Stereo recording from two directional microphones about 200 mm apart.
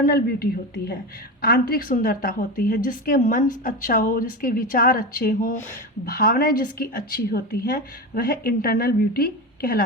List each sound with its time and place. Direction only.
0.0 s a woman's voice: 45° left (ahead or behind)